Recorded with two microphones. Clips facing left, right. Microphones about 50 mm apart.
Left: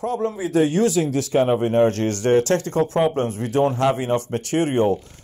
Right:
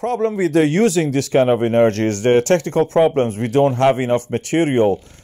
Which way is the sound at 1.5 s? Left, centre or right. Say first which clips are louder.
Right 3 dB; right.